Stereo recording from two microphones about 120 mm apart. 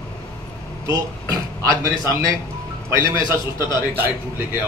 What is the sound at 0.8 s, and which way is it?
Speech, 25° right (ahead or behind).